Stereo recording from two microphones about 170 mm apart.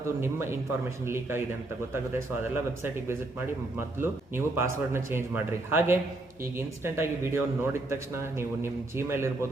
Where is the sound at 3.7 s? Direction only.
15° right (ahead or behind).